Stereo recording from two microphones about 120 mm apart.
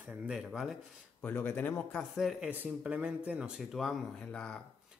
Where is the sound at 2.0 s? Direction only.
Centre (ahead or behind).